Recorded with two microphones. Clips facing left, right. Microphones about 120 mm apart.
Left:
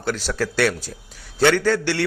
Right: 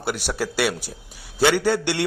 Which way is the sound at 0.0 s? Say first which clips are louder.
Left 2 dB; 15° right (ahead or behind).